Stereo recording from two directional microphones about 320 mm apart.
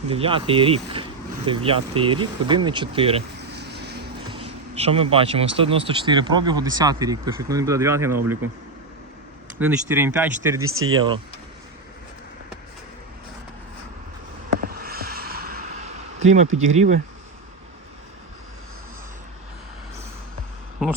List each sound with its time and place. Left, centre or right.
0.1 s speech: centre
3.5 s vehicle: right
4.3 s speech: centre
9.6 s speech: centre
10.6 s speech: right
10.9 s speech: centre
14.7 s a sound: right